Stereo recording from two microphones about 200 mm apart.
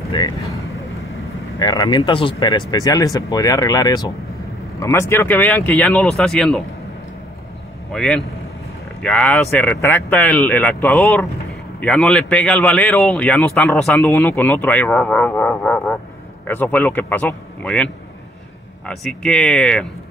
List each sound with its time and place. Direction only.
0.1 s speech: 25° left (ahead or behind)
1.6 s a man's voice: 20° left (ahead or behind); by 6.6 s 5° left (ahead or behind)
7.9 s a man's voice: 5° left (ahead or behind)